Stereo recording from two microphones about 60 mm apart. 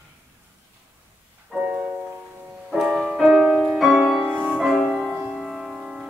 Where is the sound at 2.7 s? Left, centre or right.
Centre.